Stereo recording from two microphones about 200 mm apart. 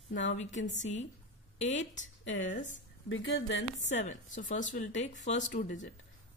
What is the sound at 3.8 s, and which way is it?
Speech, 35° left (ahead or behind).